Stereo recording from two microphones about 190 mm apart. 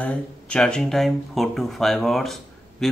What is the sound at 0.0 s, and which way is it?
Speech, 5° left (ahead or behind).